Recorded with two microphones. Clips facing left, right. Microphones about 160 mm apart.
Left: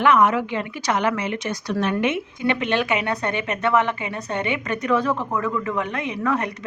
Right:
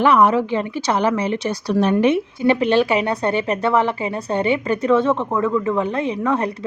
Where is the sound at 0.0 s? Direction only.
35° right (ahead or behind).